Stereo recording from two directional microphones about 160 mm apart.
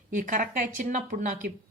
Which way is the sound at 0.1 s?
55° right (ahead or behind).